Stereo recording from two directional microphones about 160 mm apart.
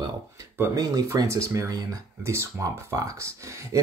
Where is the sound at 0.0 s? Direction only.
20° right (ahead or behind).